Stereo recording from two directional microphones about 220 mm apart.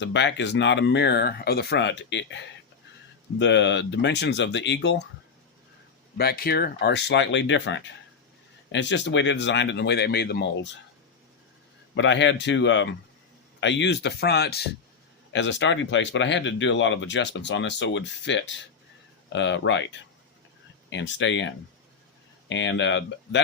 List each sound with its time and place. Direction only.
0.0 s speech: 55° left (ahead or behind)
6.1 s speech: 45° left (ahead or behind)
11.9 s speech: 55° left (ahead or behind)